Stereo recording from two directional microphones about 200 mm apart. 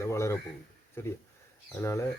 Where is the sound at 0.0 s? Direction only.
15° left (ahead or behind).